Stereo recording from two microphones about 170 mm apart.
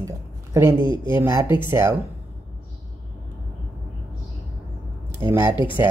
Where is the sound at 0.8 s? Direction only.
25° left (ahead or behind).